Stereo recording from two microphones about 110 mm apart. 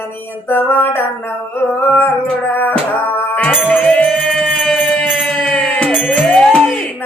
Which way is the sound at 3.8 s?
15° left (ahead or behind).